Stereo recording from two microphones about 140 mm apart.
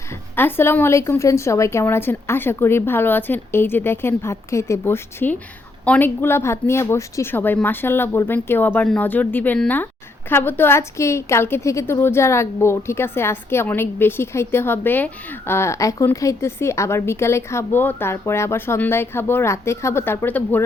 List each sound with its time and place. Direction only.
0.3 s speech: 15° left (ahead or behind)